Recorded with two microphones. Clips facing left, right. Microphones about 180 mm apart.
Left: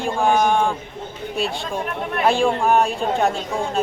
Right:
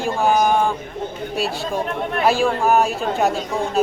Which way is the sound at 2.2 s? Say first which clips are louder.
Even; 5° right (ahead or behind).